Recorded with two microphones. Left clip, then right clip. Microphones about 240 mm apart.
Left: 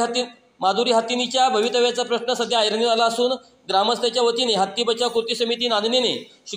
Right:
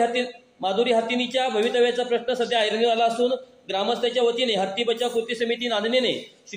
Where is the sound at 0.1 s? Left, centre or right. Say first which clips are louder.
Left 1 dB; left.